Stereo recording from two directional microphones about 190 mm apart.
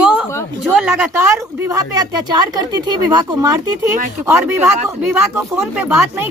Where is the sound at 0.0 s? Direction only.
5° right (ahead or behind).